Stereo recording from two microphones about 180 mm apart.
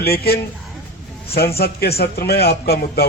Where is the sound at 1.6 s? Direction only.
60° left (ahead or behind).